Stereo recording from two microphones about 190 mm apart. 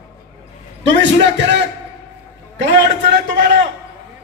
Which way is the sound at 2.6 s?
65° right (ahead or behind).